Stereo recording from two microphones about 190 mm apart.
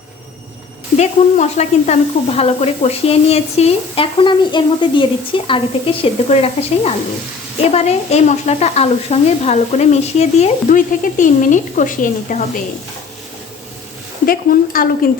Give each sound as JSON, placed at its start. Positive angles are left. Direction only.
{"t": 0.9, "sound": "sizzle", "side_deg": 35}
{"t": 5.5, "sound": "speech", "side_deg": 30}
{"t": 7.6, "sound": "sizzle", "side_deg": 35}
{"t": 14.3, "sound": "speech", "side_deg": 50}